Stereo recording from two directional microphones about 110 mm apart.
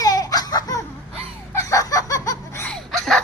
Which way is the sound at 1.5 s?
25° left (ahead or behind).